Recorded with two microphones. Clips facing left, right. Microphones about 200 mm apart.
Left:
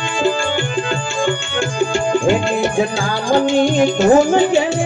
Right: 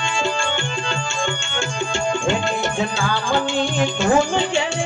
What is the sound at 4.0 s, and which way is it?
Speech, 40° left (ahead or behind).